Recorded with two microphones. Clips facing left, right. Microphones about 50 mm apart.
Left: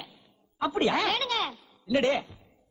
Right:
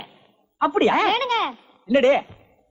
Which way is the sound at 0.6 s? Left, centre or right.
Right.